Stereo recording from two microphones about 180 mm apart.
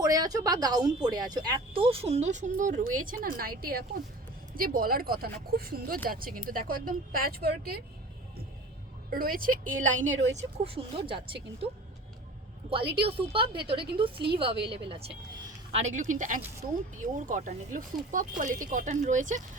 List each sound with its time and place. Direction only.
0.0 s a woman's voice: 20° right (ahead or behind); by 7.8 s 60° right (ahead or behind)
9.0 s speech: 55° right (ahead or behind); by 11.7 s 30° right (ahead or behind)
13.0 s a woman's voice: 30° right (ahead or behind)
15.7 s speech: 40° right (ahead or behind)